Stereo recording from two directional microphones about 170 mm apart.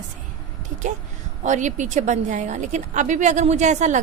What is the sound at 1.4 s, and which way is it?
A woman's voice, 45° right (ahead or behind).